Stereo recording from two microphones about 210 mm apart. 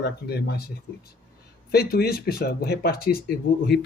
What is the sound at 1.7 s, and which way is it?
Speech, 45° left (ahead or behind).